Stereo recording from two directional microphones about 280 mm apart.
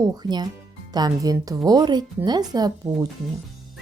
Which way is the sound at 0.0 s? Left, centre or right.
Centre.